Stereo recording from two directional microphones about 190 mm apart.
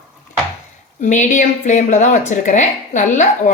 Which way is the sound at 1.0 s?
40° left (ahead or behind).